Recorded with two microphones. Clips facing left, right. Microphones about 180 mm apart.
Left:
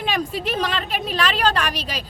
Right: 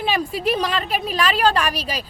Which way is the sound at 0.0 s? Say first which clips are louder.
Right 2 dB; 10° right (ahead or behind).